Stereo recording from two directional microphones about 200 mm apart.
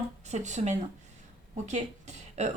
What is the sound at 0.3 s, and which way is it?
Speech, 35° right (ahead or behind).